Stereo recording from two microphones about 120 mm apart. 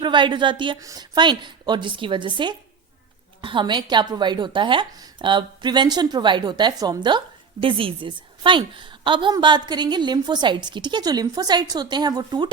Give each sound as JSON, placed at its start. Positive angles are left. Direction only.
{"t": 0.0, "sound": "a woman's voice", "side_deg": -40}
{"t": 0.8, "sound": "a woman's voice", "side_deg": -30}
{"t": 7.6, "sound": "a woman's voice", "side_deg": -45}